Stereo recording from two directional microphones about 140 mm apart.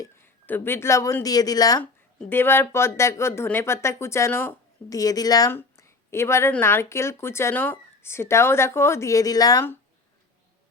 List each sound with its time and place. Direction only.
0.4 s speech: 15° left (ahead or behind)
1.8 s speech: 15° left (ahead or behind)